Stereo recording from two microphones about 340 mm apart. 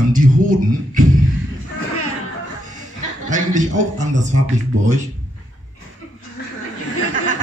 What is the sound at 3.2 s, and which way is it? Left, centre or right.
Speech, right.